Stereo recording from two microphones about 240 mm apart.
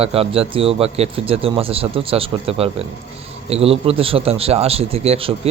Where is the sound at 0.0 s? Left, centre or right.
Right.